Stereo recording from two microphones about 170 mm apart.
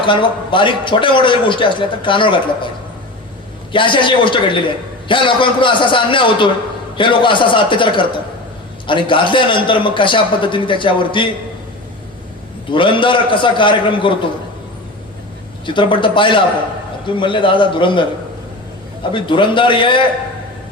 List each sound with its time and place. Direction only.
0.0 s a man's voice: 30° left (ahead or behind)
3.7 s a man's voice: 30° left (ahead or behind)
12.7 s a man's voice: 30° left (ahead or behind)
15.6 s a man's voice: 30° left (ahead or behind)
19.1 s a man's voice: 30° left (ahead or behind)